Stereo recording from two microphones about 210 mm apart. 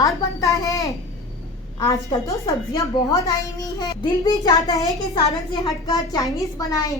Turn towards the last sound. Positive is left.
turn(degrees=15)  # may be behind; listen again after turning